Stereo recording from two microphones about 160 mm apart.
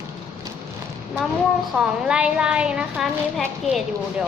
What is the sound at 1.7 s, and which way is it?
A woman's voice, 5° right (ahead or behind).